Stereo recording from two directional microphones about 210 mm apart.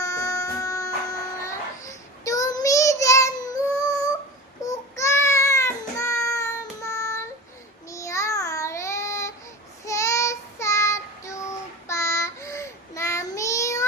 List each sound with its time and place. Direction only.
0.0 s music: 15° left (ahead or behind)
4.6 s a sound: 15° left (ahead or behind)
7.9 s child singing: 15° left (ahead or behind)